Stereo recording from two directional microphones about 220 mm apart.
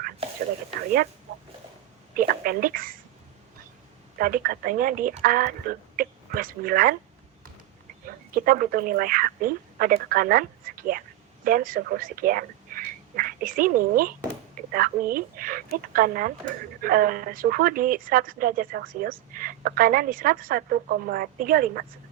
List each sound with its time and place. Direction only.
2.1 s speech: 40° right (ahead or behind)
4.2 s speech: 40° right (ahead or behind)
8.0 s speech: 40° right (ahead or behind)